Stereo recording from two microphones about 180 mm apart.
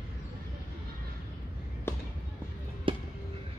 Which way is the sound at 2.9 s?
30° right (ahead or behind).